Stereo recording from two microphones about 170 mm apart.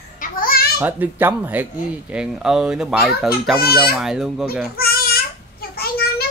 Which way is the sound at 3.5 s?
65° left (ahead or behind).